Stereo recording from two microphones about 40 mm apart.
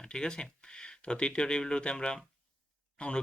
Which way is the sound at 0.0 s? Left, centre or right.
Centre.